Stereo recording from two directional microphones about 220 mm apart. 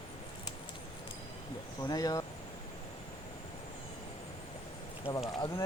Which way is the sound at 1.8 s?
15° left (ahead or behind).